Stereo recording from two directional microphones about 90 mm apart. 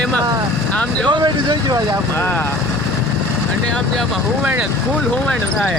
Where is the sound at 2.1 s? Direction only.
25° left (ahead or behind).